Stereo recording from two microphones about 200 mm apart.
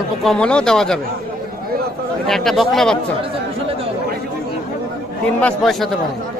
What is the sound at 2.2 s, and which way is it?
Speech, centre (ahead or behind).